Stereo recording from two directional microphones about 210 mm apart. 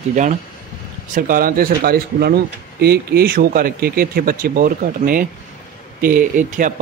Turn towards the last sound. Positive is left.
turn(degrees=-40)  # may be behind; listen again after turning